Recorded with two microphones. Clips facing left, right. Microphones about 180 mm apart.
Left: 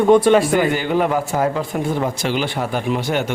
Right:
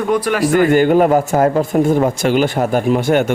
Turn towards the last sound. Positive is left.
turn(degrees=-50)  # may be behind; listen again after turning